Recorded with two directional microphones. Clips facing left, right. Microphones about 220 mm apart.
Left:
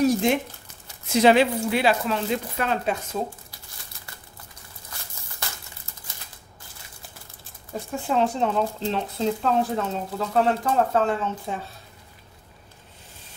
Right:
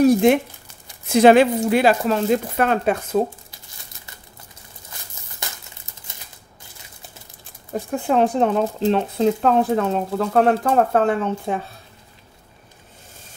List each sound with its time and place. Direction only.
0.0 s a sound: 55° right (ahead or behind)
1.1 s speech: 50° right (ahead or behind)
7.9 s speech: 55° right (ahead or behind)